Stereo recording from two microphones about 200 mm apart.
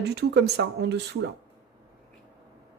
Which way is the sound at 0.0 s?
55° right (ahead or behind).